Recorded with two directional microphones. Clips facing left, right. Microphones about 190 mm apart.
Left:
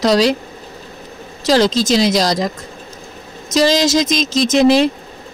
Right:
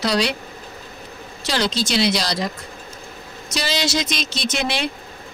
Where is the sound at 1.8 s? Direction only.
40° left (ahead or behind).